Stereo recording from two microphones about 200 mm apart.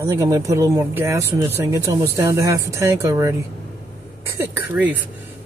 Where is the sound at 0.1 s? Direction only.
15° right (ahead or behind).